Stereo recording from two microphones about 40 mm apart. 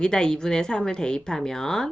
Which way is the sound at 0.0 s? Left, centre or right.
Centre.